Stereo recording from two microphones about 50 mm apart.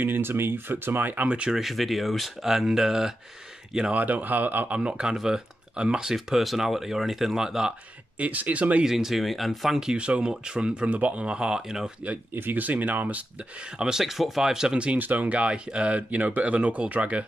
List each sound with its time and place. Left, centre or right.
0.0 s speech: right
1.5 s speech: centre
3.9 s speech: right
4.7 s speech: centre
6.1 s speech: centre
8.2 s speech: right
8.8 s speech: centre
9.8 s speech: centre
12.4 s speech: right
13.7 s speech: centre
15.0 s speech: right